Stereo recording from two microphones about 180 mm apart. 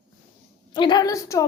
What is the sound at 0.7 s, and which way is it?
Speech, 25° left (ahead or behind).